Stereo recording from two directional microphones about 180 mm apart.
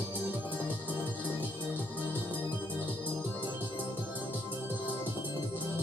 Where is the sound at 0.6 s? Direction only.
10° right (ahead or behind).